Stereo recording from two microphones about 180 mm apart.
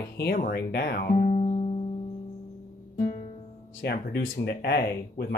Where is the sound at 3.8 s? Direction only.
65° left (ahead or behind).